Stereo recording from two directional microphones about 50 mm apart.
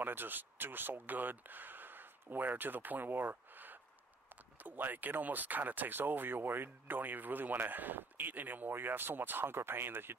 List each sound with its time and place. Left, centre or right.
0.0 s speech: right